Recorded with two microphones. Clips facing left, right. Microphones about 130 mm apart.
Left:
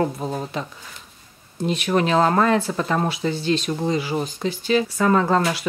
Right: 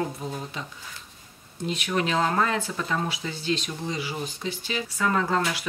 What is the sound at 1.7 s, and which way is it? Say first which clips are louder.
Speech: left 6 dB; 45° left (ahead or behind).